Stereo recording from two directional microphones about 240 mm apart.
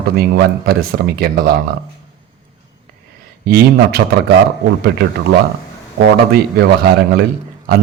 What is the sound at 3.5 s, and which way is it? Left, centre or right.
Speech, right.